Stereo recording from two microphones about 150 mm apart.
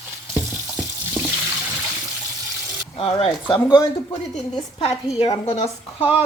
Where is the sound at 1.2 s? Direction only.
15° right (ahead or behind).